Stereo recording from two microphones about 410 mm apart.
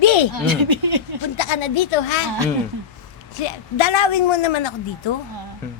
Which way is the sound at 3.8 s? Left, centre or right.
Left.